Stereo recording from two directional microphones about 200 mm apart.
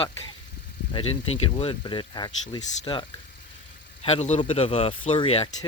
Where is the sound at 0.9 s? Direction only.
25° left (ahead or behind).